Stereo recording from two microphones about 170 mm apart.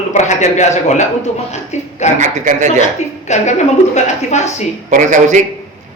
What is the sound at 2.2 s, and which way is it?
Speech, 45° right (ahead or behind).